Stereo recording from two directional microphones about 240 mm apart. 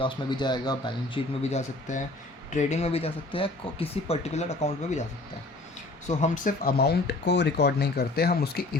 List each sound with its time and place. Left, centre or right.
0.0 s speech: centre
6.1 s speech: left